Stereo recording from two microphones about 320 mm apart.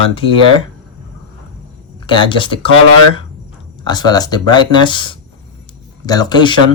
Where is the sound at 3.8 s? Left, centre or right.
Centre.